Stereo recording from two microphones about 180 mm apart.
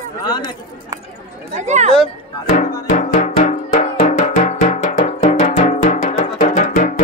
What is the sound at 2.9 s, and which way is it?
Music, 45° left (ahead or behind).